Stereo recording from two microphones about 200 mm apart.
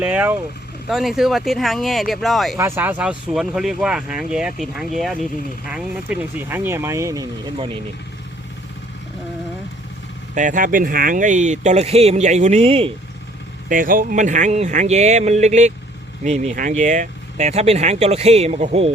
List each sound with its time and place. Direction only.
0.0 s speech: 10° right (ahead or behind)
2.6 s speech: 10° right (ahead or behind)
7.5 s speech: 30° right (ahead or behind)
10.3 s speech: 40° right (ahead or behind)
13.7 s speech: 45° right (ahead or behind)